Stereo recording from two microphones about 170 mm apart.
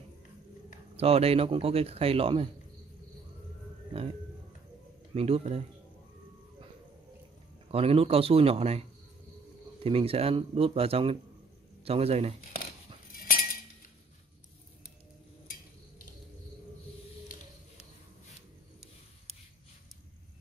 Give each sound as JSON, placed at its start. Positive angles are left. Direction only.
{"t": 0.9, "sound": "speech", "side_deg": -35}
{"t": 5.1, "sound": "speech", "side_deg": -35}
{"t": 7.7, "sound": "speech", "side_deg": -35}
{"t": 9.8, "sound": "speech", "side_deg": -35}
{"t": 13.1, "sound": "cutlery", "side_deg": 55}